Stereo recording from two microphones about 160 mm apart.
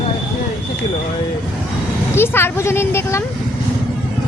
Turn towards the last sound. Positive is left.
turn(degrees=15)  # may be behind; listen again after turning